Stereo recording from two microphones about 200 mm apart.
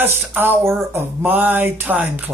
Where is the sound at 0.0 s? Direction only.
10° right (ahead or behind).